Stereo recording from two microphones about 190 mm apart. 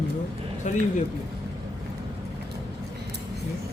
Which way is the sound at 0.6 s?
40° left (ahead or behind).